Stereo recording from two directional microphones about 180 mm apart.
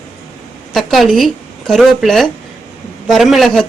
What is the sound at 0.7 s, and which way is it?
Speech, centre (ahead or behind).